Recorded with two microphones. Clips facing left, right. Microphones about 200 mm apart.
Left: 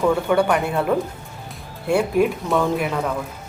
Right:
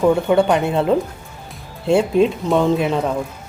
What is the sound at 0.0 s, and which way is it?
Speech, 20° right (ahead or behind).